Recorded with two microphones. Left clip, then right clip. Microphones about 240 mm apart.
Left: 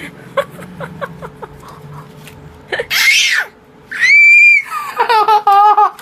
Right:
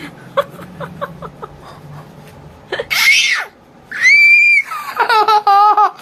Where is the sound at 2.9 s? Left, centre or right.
Centre.